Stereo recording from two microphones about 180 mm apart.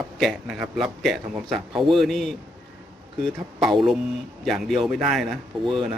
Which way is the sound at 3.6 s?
Centre (ahead or behind).